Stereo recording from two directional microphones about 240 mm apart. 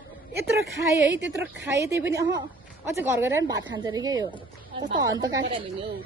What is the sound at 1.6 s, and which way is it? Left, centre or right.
A woman's voice, centre.